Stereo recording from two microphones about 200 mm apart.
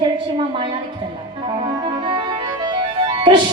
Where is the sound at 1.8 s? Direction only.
25° right (ahead or behind).